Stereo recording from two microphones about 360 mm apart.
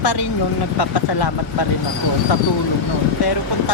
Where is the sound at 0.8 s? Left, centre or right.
Left.